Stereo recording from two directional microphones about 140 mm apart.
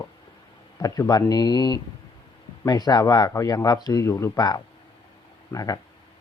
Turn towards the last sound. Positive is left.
turn(degrees=25)  # may be behind; listen again after turning